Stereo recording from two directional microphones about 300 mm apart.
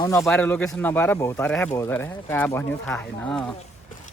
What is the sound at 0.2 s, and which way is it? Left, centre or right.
Speech, centre.